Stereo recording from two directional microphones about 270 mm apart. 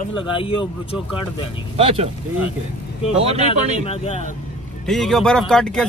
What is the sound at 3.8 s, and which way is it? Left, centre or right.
Speech, left.